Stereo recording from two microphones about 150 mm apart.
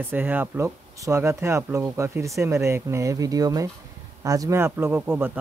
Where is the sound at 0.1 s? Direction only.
10° right (ahead or behind).